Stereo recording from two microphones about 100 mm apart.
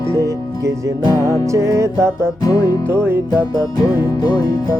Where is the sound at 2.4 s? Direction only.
40° left (ahead or behind).